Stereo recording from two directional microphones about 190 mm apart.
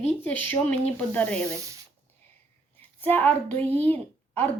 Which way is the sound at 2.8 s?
10° left (ahead or behind).